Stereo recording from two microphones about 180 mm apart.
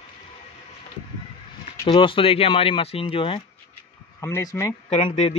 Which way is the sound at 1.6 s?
30° left (ahead or behind).